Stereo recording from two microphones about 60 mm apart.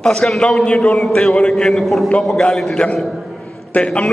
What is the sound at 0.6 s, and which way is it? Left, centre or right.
Speech, centre.